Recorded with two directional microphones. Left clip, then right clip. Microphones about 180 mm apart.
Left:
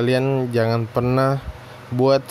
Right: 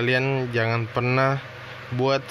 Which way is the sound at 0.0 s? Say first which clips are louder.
Left 3 dB; 45° left (ahead or behind).